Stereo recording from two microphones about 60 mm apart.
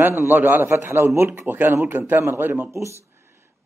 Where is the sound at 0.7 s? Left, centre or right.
Right.